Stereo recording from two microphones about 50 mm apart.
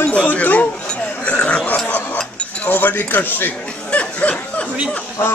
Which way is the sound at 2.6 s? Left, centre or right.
Left.